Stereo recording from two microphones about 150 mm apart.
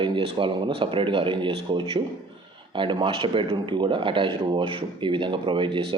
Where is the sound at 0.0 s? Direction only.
35° right (ahead or behind).